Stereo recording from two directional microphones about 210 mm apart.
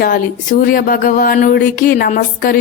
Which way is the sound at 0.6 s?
40° left (ahead or behind).